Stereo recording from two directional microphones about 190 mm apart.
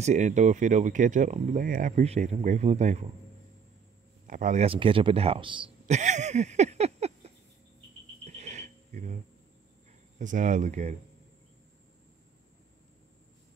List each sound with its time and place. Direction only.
0.0 s speech: 40° right (ahead or behind)
4.3 s speech: 40° right (ahead or behind); by 5.9 s 25° right (ahead or behind)
5.9 s a sound: 40° right (ahead or behind)
8.3 s cricket: 35° right (ahead or behind)
10.1 s speech: 40° right (ahead or behind)